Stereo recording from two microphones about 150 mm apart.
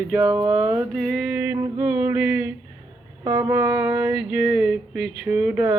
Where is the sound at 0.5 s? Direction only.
15° right (ahead or behind).